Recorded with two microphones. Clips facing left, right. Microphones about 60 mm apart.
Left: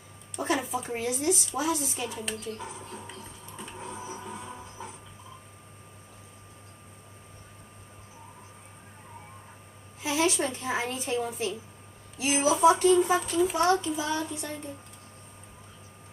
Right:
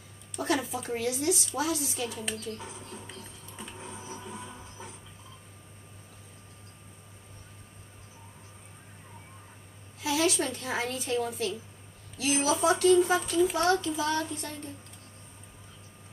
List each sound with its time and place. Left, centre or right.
0.4 s a sound: centre
0.7 s speech: left
3.5 s a sound: centre
4.0 s music: left
10.0 s a woman's voice: left
13.2 s a child's voice: centre
13.6 s child singing: centre